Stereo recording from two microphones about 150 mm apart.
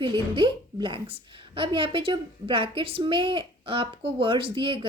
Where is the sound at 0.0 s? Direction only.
35° right (ahead or behind).